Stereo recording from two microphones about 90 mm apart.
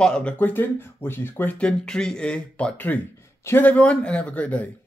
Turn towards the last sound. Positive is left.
turn(degrees=15)  # may be behind; listen again after turning